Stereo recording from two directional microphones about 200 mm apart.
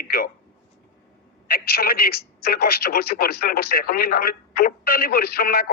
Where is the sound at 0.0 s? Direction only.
50° left (ahead or behind).